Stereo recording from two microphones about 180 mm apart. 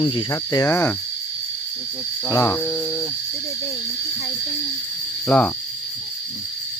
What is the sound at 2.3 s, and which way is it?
Cricket, 15° left (ahead or behind).